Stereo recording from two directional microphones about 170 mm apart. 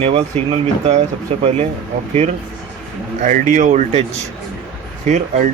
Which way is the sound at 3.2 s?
45° right (ahead or behind).